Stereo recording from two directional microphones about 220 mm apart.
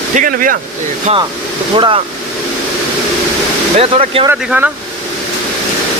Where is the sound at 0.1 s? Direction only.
35° right (ahead or behind).